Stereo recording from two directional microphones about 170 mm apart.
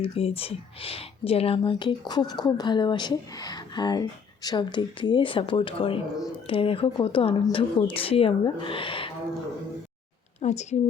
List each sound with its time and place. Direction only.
0.0 s speech: 35° left (ahead or behind)
10.4 s a woman's voice: 40° left (ahead or behind)